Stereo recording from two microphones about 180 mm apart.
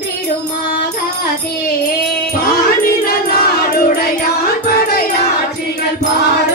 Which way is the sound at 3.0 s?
55° left (ahead or behind).